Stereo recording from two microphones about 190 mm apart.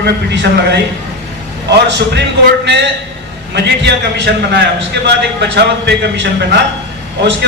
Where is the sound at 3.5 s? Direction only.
65° right (ahead or behind).